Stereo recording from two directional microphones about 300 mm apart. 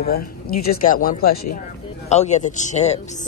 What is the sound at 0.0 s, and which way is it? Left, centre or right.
A woman's voice, left.